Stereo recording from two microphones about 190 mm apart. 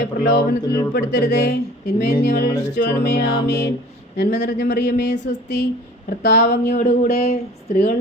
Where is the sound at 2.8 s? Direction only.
60° left (ahead or behind).